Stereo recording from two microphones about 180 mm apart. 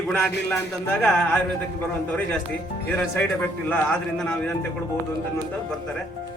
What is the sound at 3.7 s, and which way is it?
Speech, 5° left (ahead or behind).